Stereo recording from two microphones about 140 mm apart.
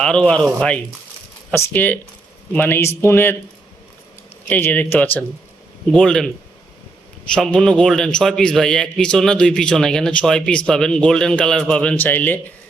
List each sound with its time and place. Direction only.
0.0 s a man's voice: 5° left (ahead or behind)
1.5 s speech: 10° left (ahead or behind)
4.4 s a man's voice: 10° left (ahead or behind)
7.3 s a man's voice: 5° left (ahead or behind)